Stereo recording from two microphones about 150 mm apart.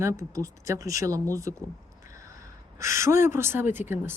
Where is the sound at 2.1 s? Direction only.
20° right (ahead or behind).